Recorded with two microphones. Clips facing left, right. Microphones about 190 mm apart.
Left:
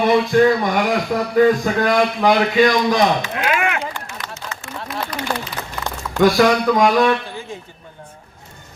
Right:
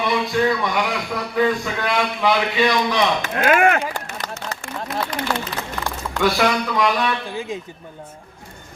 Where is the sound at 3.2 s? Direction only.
50° right (ahead or behind).